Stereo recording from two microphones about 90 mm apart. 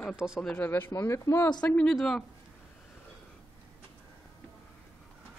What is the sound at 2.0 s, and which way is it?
Speech, 5° left (ahead or behind).